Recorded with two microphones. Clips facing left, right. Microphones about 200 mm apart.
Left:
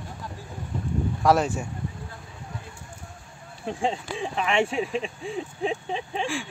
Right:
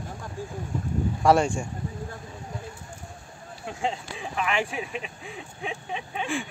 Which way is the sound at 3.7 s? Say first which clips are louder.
Left 3 dB; 30° left (ahead or behind).